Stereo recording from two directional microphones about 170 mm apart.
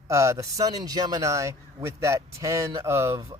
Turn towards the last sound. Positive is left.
turn(degrees=-20)  # may be behind; listen again after turning